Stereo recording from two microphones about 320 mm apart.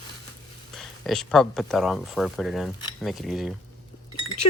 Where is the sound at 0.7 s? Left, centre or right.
Centre.